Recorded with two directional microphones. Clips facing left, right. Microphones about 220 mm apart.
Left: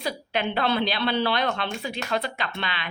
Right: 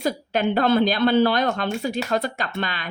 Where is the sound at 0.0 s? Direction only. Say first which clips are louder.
Right 5 dB; 45° right (ahead or behind).